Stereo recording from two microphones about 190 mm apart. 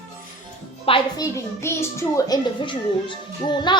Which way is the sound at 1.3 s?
15° left (ahead or behind).